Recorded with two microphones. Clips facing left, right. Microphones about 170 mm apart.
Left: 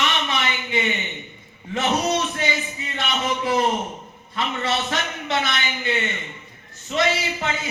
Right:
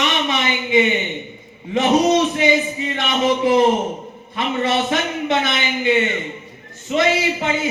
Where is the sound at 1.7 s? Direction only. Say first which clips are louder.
Right 7 dB; 15° right (ahead or behind).